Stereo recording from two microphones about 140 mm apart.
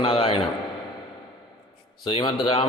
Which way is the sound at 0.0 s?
45° left (ahead or behind).